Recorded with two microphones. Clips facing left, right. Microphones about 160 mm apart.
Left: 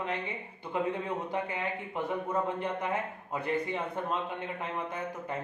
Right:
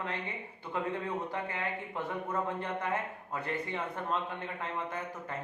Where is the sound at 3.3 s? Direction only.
15° left (ahead or behind).